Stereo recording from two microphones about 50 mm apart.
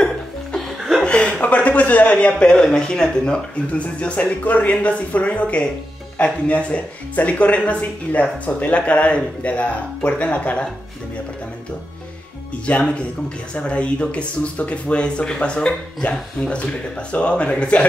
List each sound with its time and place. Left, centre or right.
0.6 s music: centre
1.0 s a sound: centre
2.3 s speech: centre
12.6 s speech: left